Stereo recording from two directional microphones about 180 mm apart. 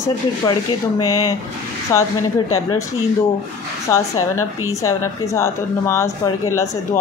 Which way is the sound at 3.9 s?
15° left (ahead or behind).